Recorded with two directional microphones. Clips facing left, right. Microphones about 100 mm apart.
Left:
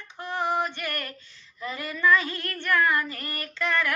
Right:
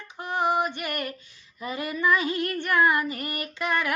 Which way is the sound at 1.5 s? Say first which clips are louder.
Right 3 dB; 15° right (ahead or behind).